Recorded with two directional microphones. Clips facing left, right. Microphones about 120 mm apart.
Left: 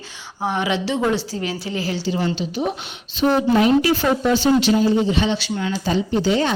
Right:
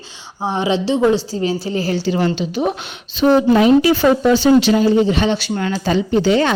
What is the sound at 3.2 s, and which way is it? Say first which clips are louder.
A woman's voice: right 4 dB; 90° right.